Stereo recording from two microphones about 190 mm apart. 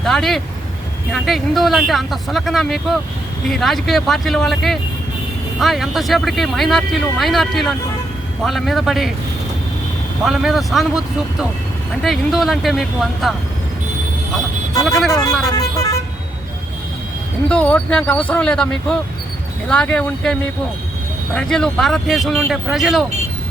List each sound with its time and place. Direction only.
0.0 s speech: centre (ahead or behind)
10.2 s speech: centre (ahead or behind)
14.8 s speech: centre (ahead or behind)
15.5 s speech: 15° left (ahead or behind)
17.5 s speech: 5° left (ahead or behind)